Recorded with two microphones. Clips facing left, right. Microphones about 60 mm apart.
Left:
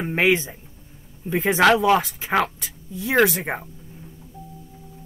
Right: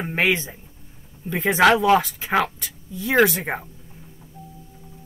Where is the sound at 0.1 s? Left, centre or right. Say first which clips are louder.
Left 2 dB; centre.